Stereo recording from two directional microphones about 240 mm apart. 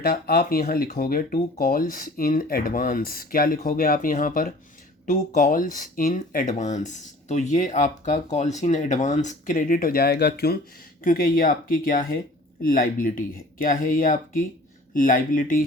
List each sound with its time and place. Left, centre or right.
0.0 s speech: left